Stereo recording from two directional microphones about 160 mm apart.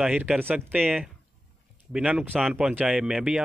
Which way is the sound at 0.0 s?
5° right (ahead or behind).